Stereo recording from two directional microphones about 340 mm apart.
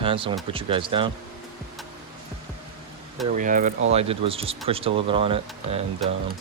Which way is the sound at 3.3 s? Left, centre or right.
Right.